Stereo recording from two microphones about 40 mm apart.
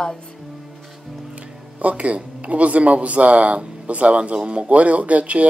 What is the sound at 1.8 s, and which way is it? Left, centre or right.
Speech, right.